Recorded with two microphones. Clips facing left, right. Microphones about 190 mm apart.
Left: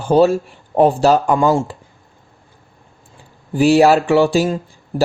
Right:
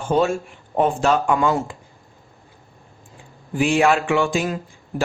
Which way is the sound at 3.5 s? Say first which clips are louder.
Left 6 dB; 35° left (ahead or behind).